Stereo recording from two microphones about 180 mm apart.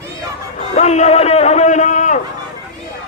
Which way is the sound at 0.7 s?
40° left (ahead or behind).